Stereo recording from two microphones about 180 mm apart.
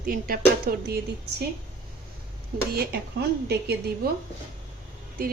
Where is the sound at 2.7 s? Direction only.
65° right (ahead or behind).